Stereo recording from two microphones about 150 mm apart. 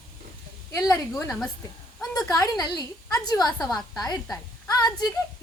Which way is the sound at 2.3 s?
25° left (ahead or behind).